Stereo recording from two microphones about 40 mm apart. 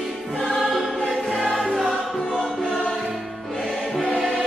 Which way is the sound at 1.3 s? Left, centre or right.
Centre.